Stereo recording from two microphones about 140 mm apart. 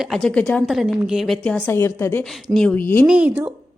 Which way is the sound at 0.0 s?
5° left (ahead or behind).